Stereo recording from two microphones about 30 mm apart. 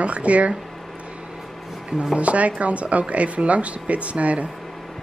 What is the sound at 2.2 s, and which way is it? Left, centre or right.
Speech, right.